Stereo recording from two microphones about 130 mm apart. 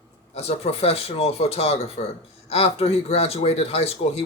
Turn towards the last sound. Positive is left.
turn(degrees=50)  # may be behind; listen again after turning